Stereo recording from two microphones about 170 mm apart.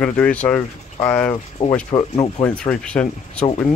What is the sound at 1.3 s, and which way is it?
Speech, 30° left (ahead or behind).